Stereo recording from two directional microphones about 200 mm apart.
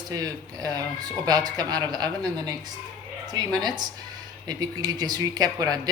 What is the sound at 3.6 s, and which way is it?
A man's voice, 20° right (ahead or behind).